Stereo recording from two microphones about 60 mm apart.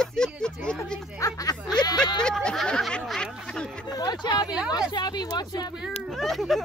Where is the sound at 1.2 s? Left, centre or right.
Left.